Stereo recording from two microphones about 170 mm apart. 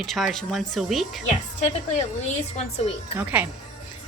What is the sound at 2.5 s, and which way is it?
Speech, 40° left (ahead or behind).